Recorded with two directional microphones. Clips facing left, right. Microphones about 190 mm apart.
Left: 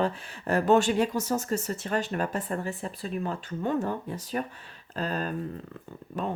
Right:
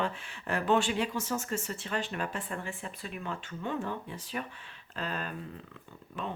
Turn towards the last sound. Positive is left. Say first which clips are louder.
# left 6 dB
turn(degrees=40)  # may be behind; listen again after turning